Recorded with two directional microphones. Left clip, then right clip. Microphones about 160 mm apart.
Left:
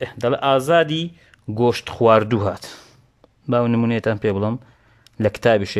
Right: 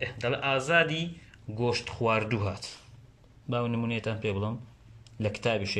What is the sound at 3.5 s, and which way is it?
Speech, 60° left (ahead or behind).